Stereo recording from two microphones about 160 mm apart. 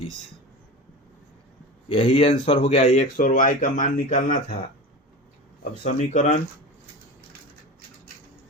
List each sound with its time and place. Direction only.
1.9 s speech: 35° left (ahead or behind); by 4.5 s 55° left (ahead or behind)
5.8 s speech: 45° left (ahead or behind)